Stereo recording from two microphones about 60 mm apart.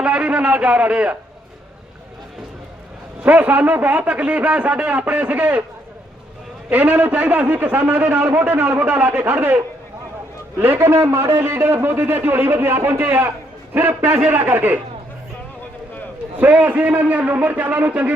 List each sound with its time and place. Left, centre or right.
0.0 s a man's voice: centre
3.2 s a man's voice: right
6.7 s a man's voice: right
10.6 s a man's voice: right
16.4 s a man's voice: right